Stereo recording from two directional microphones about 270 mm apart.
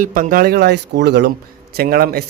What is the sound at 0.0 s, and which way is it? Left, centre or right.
Speech, right.